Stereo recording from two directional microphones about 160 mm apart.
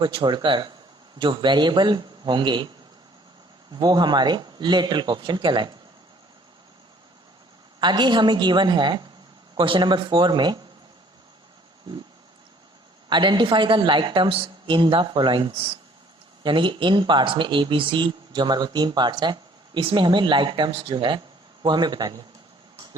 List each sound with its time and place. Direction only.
0.0 s speech: 30° right (ahead or behind)
3.7 s speech: 25° right (ahead or behind)
7.8 s speech: 30° right (ahead or behind)
13.1 s speech: 30° right (ahead or behind)